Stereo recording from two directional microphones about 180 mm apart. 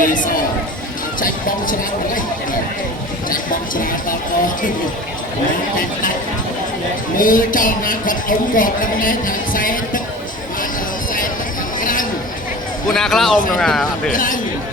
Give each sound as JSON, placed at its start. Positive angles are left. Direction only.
{"t": 0.0, "sound": "speech", "side_deg": 50}
{"t": 3.2, "sound": "speech", "side_deg": 50}
{"t": 5.7, "sound": "speech", "side_deg": 50}
{"t": 7.2, "sound": "speech", "side_deg": 50}
{"t": 11.8, "sound": "a sound", "side_deg": 50}
{"t": 12.9, "sound": "speech", "side_deg": 0}
{"t": 14.1, "sound": "speech", "side_deg": 45}